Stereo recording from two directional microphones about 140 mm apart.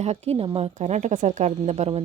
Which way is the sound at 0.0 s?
50° right (ahead or behind).